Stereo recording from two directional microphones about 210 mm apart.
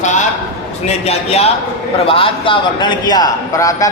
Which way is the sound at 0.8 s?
30° left (ahead or behind).